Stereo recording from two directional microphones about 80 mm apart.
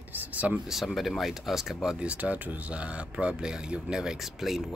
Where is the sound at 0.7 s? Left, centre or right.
Centre.